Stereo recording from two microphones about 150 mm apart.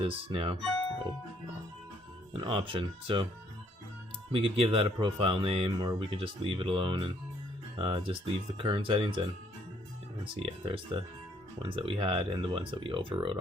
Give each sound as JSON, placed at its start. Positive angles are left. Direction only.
{"t": 0.0, "sound": "speech", "side_deg": -40}
{"t": 2.3, "sound": "speech", "side_deg": -35}
{"t": 4.3, "sound": "speech", "side_deg": -40}
{"t": 10.4, "sound": "speech", "side_deg": -35}